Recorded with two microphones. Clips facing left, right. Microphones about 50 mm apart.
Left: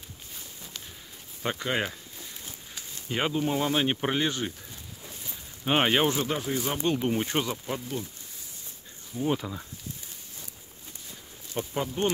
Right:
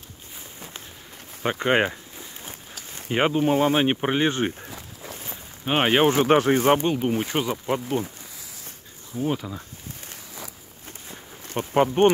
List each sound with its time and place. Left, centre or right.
1.6 s speech: right
3.1 s speech: right
4.3 s speech: right
4.6 s a sound: right
5.7 s speech: centre
6.0 s speech: right
6.3 s speech: right
6.9 s speech: centre
7.4 s speech: right
9.2 s speech: centre
11.1 s insect: right